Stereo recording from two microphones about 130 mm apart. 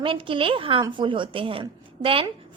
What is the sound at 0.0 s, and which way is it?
A woman's voice, 40° right (ahead or behind).